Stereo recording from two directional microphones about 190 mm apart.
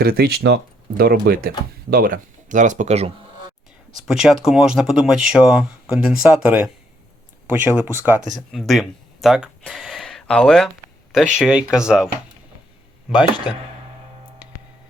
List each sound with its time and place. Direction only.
0.0 s speech: 55° right (ahead or behind); by 3.1 s 35° right (ahead or behind)
4.0 s speech: centre (ahead or behind)
7.8 s speech: 10° right (ahead or behind)
8.5 s speech: centre (ahead or behind)